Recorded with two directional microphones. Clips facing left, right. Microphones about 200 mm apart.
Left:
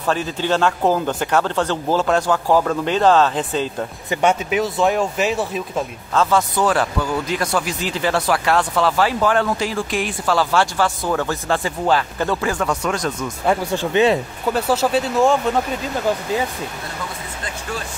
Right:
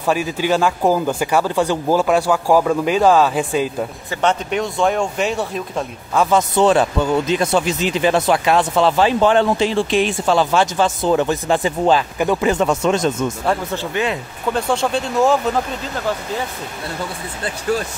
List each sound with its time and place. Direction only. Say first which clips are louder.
0.0 s speech: right 2 dB; 10° right (ahead or behind)
4.1 s speech: left 2 dB; 10° left (ahead or behind)
6.1 s speech: right 2 dB; 20° right (ahead or behind)
13.5 s speech: left 5 dB; 10° left (ahead or behind)
13.9 s speech: left 7 dB; 30° left (ahead or behind)
14.5 s speech: left 1 dB; 5° left (ahead or behind)